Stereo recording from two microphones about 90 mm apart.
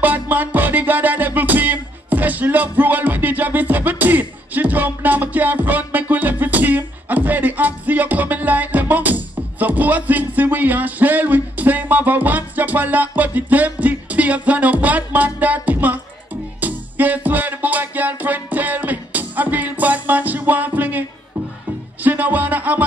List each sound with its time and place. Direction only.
0.0 s music: 20° right (ahead or behind)
22.0 s music: 20° right (ahead or behind)